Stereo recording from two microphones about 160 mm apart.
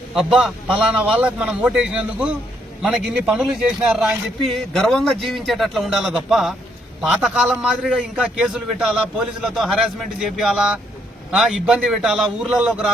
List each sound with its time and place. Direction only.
0.1 s a man's voice: 5° right (ahead or behind)